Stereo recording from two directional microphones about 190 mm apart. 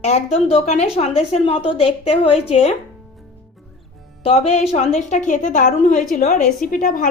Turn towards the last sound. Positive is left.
turn(degrees=45)  # may be behind; listen again after turning